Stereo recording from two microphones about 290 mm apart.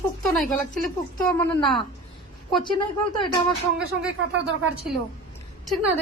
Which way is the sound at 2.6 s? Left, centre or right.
Centre.